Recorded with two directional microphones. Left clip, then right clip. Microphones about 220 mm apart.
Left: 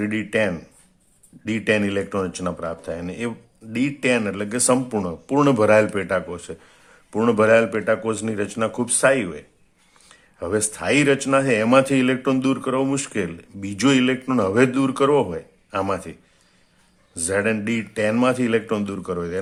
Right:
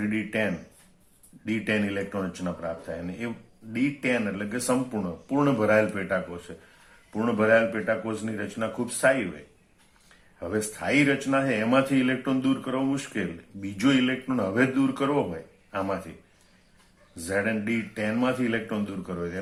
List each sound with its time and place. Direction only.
0.0 s a man's voice: 50° left (ahead or behind)
10.4 s a man's voice: 50° left (ahead or behind)
17.2 s a man's voice: 50° left (ahead or behind)